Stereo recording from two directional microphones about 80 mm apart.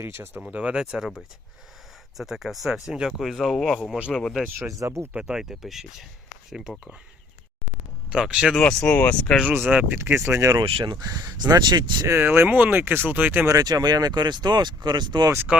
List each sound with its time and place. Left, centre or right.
0.0 s speech: right
0.5 s speech: centre
4.8 s speech: right
5.1 s speech: centre
8.1 s speech: centre
8.5 s speech: centre
9.5 s speech: right
10.2 s speech: right
10.6 s speech: right
12.0 s speech: right
13.5 s speech: right
15.5 s speech: centre